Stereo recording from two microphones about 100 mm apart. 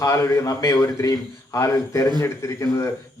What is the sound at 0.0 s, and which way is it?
Speech, 30° left (ahead or behind).